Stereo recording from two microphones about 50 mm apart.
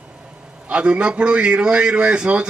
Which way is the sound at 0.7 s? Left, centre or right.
Right.